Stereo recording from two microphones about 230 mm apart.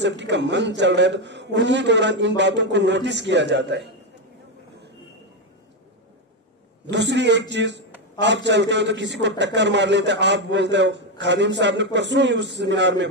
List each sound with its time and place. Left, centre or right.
0.0 s a man's voice: right
6.9 s a man's voice: right